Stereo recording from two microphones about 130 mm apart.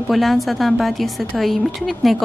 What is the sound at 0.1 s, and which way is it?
A woman's voice, centre (ahead or behind).